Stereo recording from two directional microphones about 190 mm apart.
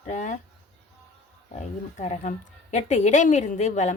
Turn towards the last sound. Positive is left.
turn(degrees=40)  # may be behind; listen again after turning